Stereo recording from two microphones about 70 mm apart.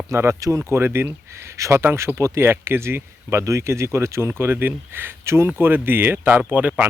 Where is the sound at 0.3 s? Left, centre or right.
Right.